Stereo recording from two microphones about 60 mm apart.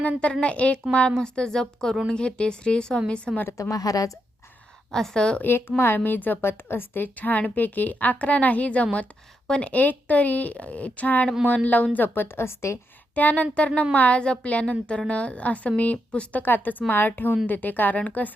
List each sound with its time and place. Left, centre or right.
0.4 s a woman's voice: left
3.6 s a woman's voice: left
4.9 s a woman's voice: centre
5.4 s a woman's voice: left
13.1 s a woman's voice: left